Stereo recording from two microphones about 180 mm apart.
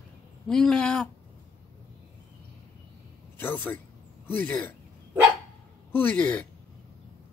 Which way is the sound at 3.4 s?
10° left (ahead or behind).